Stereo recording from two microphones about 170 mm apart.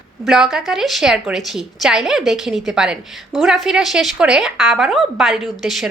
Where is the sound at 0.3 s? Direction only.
Centre (ahead or behind).